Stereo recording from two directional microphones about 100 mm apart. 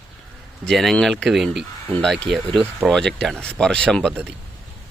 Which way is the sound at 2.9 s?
5° left (ahead or behind).